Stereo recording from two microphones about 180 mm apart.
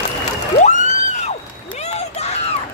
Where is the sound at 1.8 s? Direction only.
35° left (ahead or behind).